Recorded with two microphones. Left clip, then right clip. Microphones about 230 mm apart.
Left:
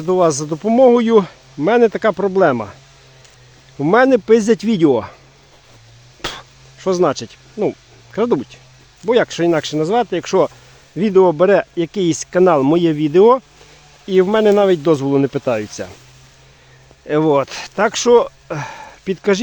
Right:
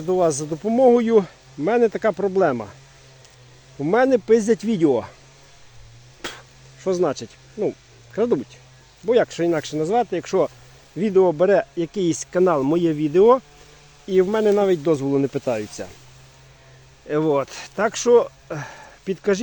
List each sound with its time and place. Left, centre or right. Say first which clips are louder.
0.0 s speech: left 5 dB; left
3.8 s speech: left 6 dB; left
6.2 s a sound: left 7 dB; left
9.0 s speech: left 4 dB; left
17.1 s speech: left 6 dB; left